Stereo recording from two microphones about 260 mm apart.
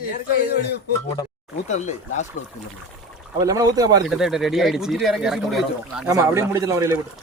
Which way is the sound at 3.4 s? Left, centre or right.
Centre.